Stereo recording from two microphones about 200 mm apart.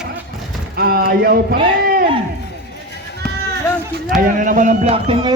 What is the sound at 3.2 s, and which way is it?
Run, 5° left (ahead or behind).